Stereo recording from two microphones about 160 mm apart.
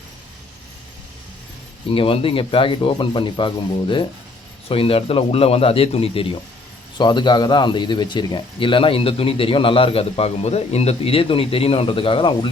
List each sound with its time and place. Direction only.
1.9 s a man's voice: 35° left (ahead or behind)